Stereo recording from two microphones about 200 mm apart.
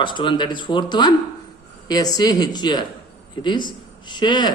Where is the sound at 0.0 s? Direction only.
25° left (ahead or behind).